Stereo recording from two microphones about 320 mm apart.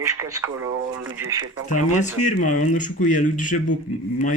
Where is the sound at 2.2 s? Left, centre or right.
Left.